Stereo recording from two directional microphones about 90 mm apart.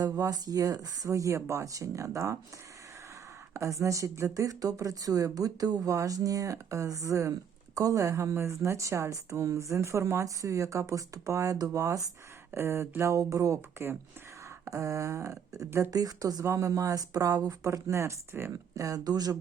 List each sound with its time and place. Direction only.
0.0 s a woman's voice: 45° right (ahead or behind)
3.5 s a woman's voice: 35° right (ahead or behind)
15.9 s a woman's voice: 45° right (ahead or behind)